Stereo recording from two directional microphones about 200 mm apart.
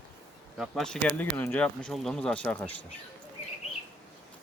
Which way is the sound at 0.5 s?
Centre (ahead or behind).